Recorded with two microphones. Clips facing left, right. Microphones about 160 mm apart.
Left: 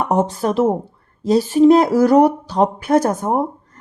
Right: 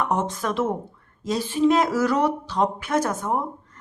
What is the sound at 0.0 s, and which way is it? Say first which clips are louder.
Speech: left 7 dB; 35° left (ahead or behind).